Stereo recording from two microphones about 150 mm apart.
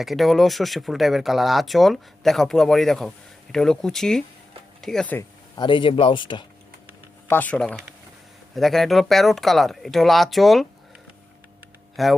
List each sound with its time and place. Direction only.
0.0 s speech: centre (ahead or behind)
5.5 s speech: 35° left (ahead or behind)
7.3 s speech: 10° left (ahead or behind)
12.0 s speech: centre (ahead or behind)